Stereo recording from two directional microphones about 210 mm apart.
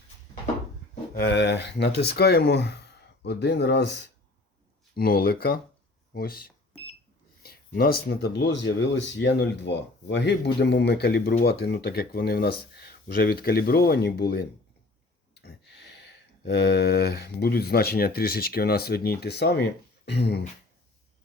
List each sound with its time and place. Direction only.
1.1 s speech: 50° left (ahead or behind)
4.9 s speech: 45° left (ahead or behind)